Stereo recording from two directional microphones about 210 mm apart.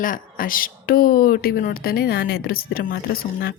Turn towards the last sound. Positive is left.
turn(degrees=45)  # may be behind; listen again after turning